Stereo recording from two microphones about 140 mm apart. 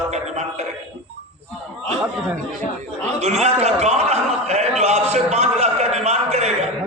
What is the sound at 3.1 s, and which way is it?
Chuckle, 50° right (ahead or behind).